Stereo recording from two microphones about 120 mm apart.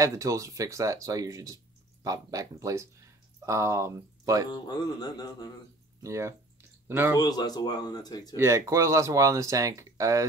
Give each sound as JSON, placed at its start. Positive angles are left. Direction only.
{"t": 0.0, "sound": "speech", "side_deg": -25}
{"t": 4.5, "sound": "speech", "side_deg": 35}
{"t": 6.0, "sound": "speech", "side_deg": -25}
{"t": 7.2, "sound": "speech", "side_deg": 35}
{"t": 8.4, "sound": "speech", "side_deg": -25}